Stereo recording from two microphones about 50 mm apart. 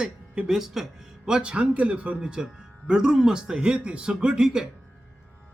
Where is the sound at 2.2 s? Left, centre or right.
Centre.